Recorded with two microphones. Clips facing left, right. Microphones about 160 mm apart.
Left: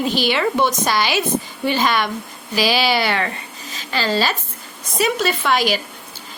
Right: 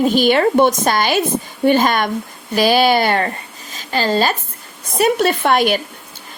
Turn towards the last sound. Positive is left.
turn(degrees=-55)  # may be behind; listen again after turning